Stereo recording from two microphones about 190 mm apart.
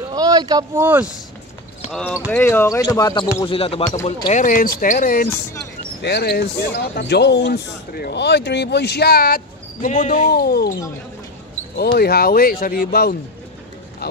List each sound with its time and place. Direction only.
0.1 s a sound: 20° right (ahead or behind)
0.8 s speech: 5° right (ahead or behind)
1.9 s speech: 5° left (ahead or behind)
3.4 s speech: 30° left (ahead or behind)
4.3 s speech: 45° left (ahead or behind)
6.0 s speech: 60° left (ahead or behind); by 10.3 s 40° left (ahead or behind)
10.3 s speech: 55° left (ahead or behind)
11.7 s speech: 55° left (ahead or behind)